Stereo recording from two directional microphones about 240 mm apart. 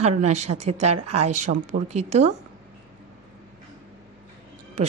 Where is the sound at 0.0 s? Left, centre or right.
Right.